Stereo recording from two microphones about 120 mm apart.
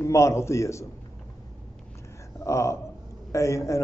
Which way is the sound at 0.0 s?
25° left (ahead or behind).